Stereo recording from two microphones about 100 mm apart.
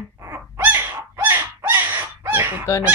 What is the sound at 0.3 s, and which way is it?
Owl, 20° right (ahead or behind).